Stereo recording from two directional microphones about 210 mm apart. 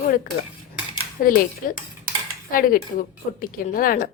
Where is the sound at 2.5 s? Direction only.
40° left (ahead or behind).